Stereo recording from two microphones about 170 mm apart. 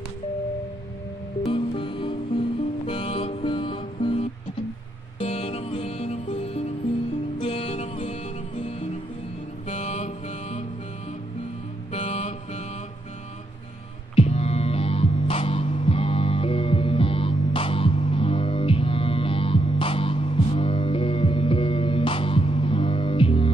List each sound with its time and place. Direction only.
1.4 s music: 30° left (ahead or behind)
9.7 s mantra: 45° left (ahead or behind)
11.9 s music: 40° left (ahead or behind)
14.1 s music: 40° left (ahead or behind)